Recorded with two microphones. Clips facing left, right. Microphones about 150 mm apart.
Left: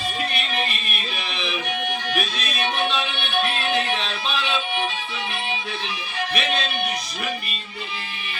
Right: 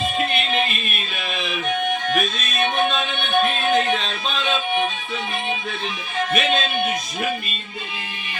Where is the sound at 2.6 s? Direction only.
50° right (ahead or behind).